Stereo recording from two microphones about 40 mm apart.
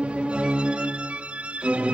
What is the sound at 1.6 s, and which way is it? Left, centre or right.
Music, right.